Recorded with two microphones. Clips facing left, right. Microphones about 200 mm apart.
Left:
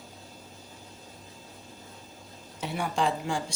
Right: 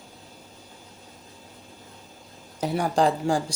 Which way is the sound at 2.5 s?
40° right (ahead or behind).